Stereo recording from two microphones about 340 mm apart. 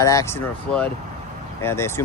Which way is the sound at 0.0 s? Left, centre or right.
Centre.